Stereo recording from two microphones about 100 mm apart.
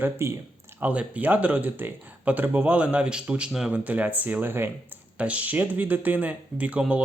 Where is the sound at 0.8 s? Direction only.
15° right (ahead or behind).